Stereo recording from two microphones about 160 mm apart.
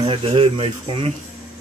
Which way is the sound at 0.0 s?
35° right (ahead or behind).